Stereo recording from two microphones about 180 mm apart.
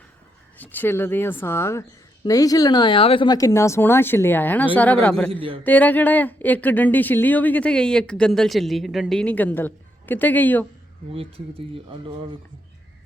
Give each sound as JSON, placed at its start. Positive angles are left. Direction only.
{"t": 0.6, "sound": "speech", "side_deg": 10}
{"t": 5.3, "sound": "a man's voice", "side_deg": -30}
{"t": 5.6, "sound": "speech", "side_deg": 10}
{"t": 11.1, "sound": "speech", "side_deg": -30}